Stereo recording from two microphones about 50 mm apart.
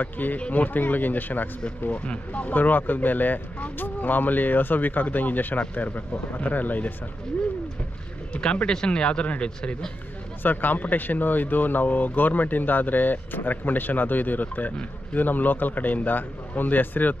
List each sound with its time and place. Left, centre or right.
0.0 s speech: left
1.9 s speech: left
8.4 s speech: centre
9.6 s speech: centre
10.4 s speech: left